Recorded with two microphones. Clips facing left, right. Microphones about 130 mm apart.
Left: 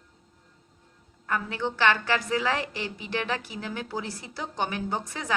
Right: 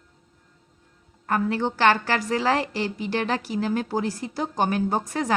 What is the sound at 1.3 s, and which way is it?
A woman's voice, 40° right (ahead or behind).